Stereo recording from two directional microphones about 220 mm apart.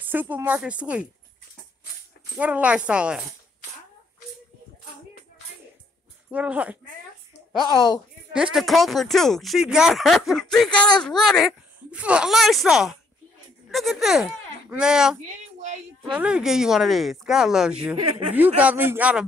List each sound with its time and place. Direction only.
0.0 s a woman's voice: 10° right (ahead or behind)
2.3 s speech: 5° right (ahead or behind)
6.3 s a woman's voice: 5° right (ahead or behind)
7.7 s speech: 20° left (ahead or behind)
8.5 s a woman's voice: centre (ahead or behind)